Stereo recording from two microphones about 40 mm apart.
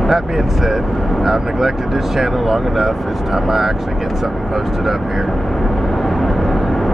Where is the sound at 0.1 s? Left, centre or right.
Centre.